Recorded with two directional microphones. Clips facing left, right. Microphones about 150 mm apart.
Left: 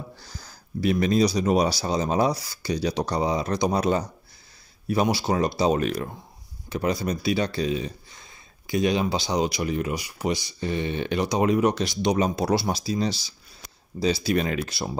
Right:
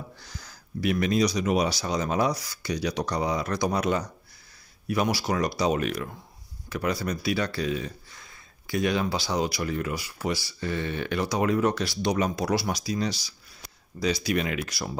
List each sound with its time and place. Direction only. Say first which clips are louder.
0.2 s speech: left 1 dB; 30° left (ahead or behind)